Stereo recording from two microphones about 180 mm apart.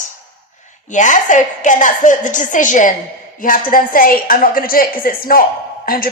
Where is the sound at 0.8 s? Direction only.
45° left (ahead or behind).